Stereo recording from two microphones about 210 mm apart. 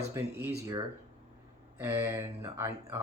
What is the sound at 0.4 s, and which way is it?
Speech, 15° right (ahead or behind).